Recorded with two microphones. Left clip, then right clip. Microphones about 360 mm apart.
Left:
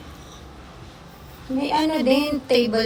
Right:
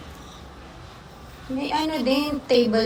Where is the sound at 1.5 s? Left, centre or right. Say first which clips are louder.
Left 3 dB; centre.